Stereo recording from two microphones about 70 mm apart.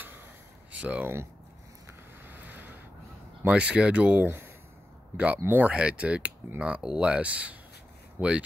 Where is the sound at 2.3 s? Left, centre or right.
Right.